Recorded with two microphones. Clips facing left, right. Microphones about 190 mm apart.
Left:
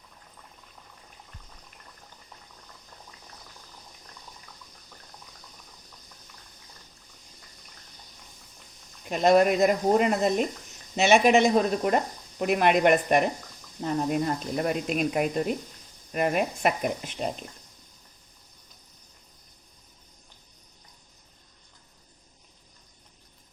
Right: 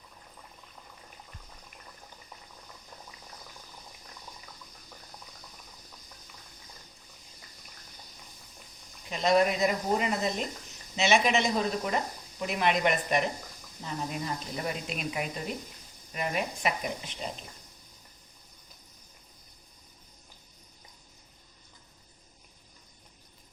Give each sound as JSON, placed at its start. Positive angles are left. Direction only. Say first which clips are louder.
{"t": 9.0, "sound": "speech", "louder": "left 5 dB", "side_deg": 50}